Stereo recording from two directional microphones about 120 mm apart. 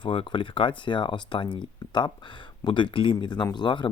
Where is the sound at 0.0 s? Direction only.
45° left (ahead or behind).